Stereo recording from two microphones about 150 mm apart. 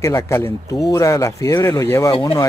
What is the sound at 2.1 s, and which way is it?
Speech, 35° left (ahead or behind).